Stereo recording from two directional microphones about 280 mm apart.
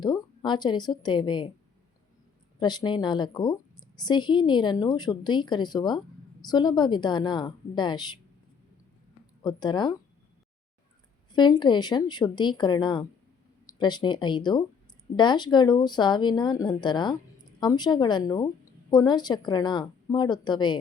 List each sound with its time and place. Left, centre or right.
0.0 s speech: centre
2.6 s a woman's voice: centre
9.4 s a woman's voice: centre
11.3 s a woman's voice: centre